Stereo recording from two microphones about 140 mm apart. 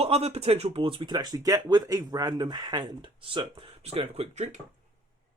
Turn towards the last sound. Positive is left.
turn(degrees=-50)  # may be behind; listen again after turning